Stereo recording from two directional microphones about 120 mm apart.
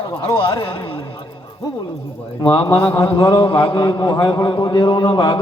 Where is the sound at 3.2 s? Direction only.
40° left (ahead or behind).